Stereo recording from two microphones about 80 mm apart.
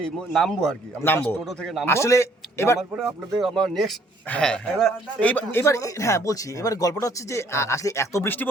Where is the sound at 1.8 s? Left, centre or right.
Left.